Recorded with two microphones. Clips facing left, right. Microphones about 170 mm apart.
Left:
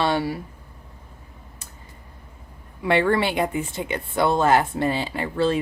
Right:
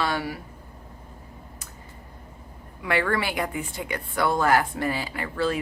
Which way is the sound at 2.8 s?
25° left (ahead or behind).